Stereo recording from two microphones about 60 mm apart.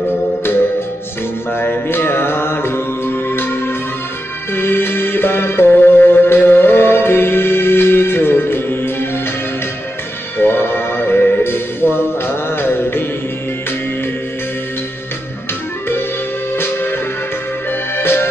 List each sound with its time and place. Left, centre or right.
1.5 s mantra: left
3.3 s music: left
10.3 s music: left
16.5 s music: left